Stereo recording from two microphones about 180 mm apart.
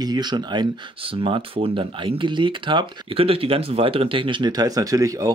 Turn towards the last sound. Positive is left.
turn(degrees=-20)  # may be behind; listen again after turning